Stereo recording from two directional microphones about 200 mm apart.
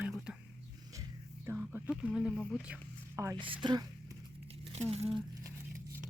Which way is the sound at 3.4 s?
25° right (ahead or behind).